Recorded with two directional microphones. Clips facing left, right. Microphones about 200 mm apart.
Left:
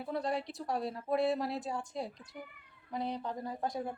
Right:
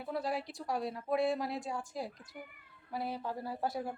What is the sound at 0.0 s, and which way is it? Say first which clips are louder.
Speech: left 1 dB; centre (ahead or behind).